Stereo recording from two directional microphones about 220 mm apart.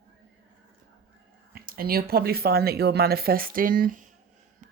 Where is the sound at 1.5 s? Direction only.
45° right (ahead or behind).